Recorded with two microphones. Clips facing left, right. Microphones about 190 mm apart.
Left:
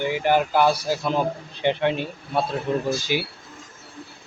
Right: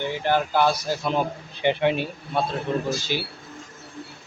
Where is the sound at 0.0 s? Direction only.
10° left (ahead or behind).